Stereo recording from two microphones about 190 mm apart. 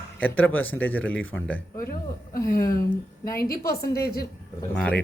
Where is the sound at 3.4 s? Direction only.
50° left (ahead or behind).